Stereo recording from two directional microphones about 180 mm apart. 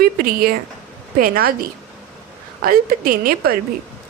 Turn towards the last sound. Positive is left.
turn(degrees=-55)  # may be behind; listen again after turning